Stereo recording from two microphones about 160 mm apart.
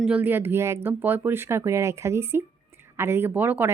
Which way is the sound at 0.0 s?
10° right (ahead or behind).